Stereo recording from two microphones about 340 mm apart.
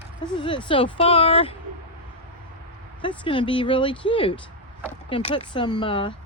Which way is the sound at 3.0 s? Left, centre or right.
Centre.